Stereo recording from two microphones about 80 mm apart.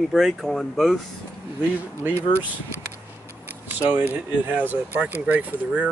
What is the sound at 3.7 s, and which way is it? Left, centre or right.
Speech, right.